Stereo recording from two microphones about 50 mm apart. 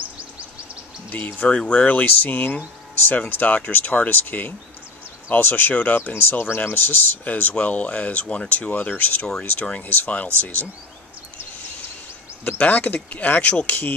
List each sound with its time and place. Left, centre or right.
1.1 s speech: left
1.5 s speech: left
1.9 s speech: left
6.1 s speech: left
12.5 s speech: left